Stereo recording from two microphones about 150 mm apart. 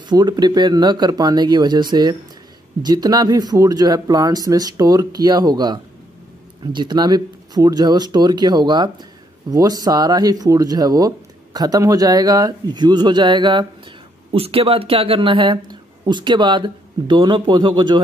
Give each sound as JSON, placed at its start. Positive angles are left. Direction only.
{"t": 0.1, "sound": "speech", "side_deg": -25}